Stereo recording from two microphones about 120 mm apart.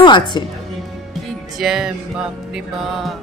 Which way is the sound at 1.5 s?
5° right (ahead or behind).